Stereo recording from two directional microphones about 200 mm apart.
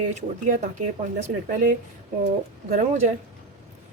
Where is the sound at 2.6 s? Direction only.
35° right (ahead or behind).